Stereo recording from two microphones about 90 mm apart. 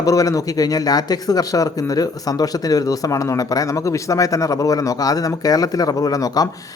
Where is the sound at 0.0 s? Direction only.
40° left (ahead or behind).